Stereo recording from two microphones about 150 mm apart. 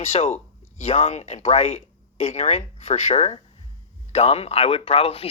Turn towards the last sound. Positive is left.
turn(degrees=40)  # may be behind; listen again after turning